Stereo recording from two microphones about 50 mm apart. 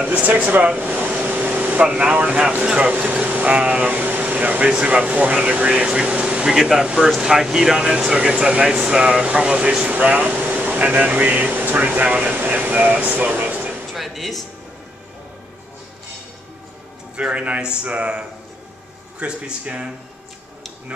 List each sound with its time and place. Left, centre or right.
0.1 s a man's voice: right
2.9 s speech: right
6.4 s speech: centre
9.8 s speech: right
13.9 s music: centre
17.2 s a man's voice: right